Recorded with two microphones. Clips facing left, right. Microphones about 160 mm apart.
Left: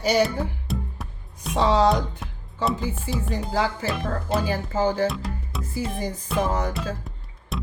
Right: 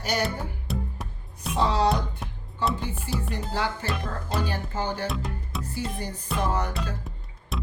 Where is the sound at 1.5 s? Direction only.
90° left.